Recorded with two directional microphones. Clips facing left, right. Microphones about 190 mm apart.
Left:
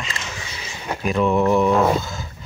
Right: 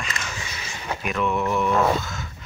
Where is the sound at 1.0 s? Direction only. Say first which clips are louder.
Left 7 dB; 35° left (ahead or behind).